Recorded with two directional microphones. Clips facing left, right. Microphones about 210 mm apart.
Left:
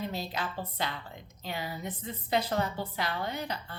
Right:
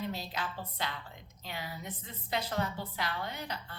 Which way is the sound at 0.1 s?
30° left (ahead or behind).